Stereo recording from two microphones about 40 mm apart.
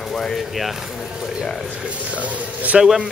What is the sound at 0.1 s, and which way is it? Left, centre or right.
Speech, centre.